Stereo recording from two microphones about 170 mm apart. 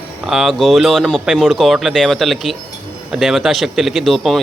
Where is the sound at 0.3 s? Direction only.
Centre (ahead or behind).